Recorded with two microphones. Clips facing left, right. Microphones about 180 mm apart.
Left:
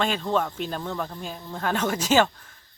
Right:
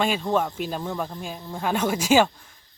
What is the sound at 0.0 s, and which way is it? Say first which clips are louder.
Speech: right 2 dB; 10° right (ahead or behind).